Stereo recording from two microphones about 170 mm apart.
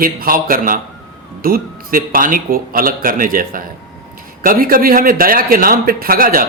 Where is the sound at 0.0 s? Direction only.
60° right (ahead or behind).